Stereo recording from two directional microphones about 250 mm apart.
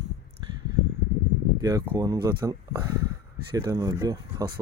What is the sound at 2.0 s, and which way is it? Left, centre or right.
Speech, centre.